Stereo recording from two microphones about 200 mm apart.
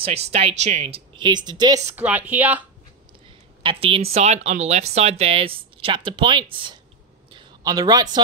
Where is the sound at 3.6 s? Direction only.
30° right (ahead or behind).